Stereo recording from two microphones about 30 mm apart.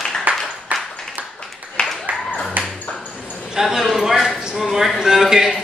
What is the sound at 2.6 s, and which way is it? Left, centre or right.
Dog, right.